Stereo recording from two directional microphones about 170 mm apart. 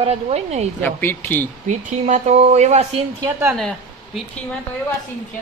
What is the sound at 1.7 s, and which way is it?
Speech, 45° right (ahead or behind).